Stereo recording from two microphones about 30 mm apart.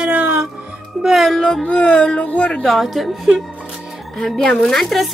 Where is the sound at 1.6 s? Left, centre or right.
Left.